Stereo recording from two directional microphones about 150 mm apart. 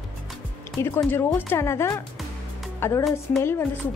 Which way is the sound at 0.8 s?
15° left (ahead or behind).